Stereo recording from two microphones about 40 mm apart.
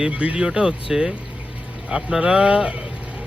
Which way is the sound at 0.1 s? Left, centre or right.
Right.